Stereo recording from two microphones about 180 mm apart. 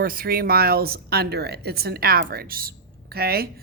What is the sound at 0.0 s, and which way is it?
A woman's voice, 55° right (ahead or behind).